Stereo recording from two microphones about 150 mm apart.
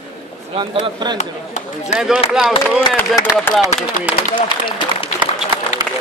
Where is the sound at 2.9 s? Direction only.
10° left (ahead or behind).